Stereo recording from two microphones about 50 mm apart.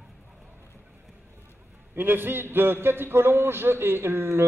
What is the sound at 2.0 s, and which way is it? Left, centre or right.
A man's voice, right.